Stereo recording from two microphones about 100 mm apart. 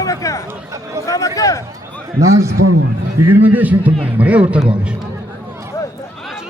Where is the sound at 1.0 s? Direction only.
35° left (ahead or behind).